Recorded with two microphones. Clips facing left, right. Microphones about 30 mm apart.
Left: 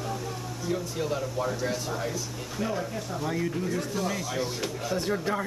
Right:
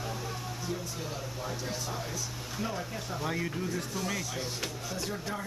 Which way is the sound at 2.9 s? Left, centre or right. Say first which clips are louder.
Left 3 dB; centre.